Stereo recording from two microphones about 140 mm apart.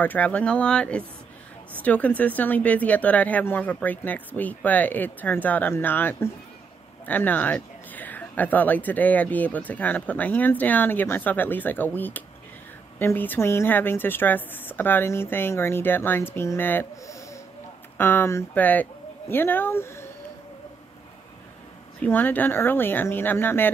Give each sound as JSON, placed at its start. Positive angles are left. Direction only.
{"t": 0.0, "sound": "speech", "side_deg": 10}
{"t": 22.0, "sound": "speech", "side_deg": 10}